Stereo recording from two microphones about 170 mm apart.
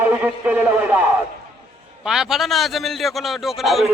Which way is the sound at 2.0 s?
5° right (ahead or behind).